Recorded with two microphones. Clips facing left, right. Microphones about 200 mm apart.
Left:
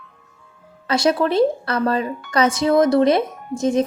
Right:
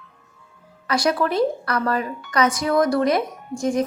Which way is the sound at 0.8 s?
25° left (ahead or behind).